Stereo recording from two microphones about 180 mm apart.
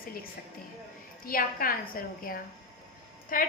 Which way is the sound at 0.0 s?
55° left (ahead or behind).